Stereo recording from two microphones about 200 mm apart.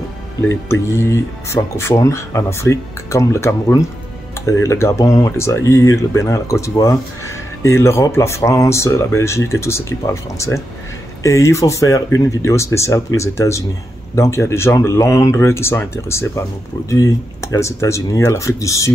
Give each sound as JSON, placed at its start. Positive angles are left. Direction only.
{"t": 0.5, "sound": "speech", "side_deg": 15}